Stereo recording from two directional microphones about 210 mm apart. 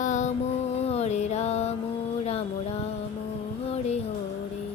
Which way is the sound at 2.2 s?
30° left (ahead or behind).